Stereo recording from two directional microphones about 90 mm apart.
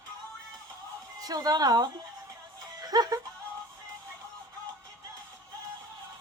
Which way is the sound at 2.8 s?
45° right (ahead or behind).